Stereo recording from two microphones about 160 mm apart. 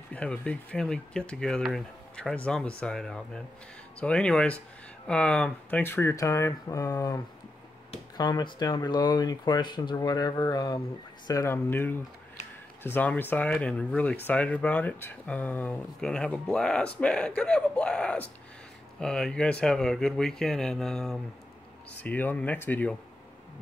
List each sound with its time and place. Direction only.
0.1 s speech: 10° left (ahead or behind)
8.2 s speech: 25° left (ahead or behind); by 22.9 s 10° left (ahead or behind)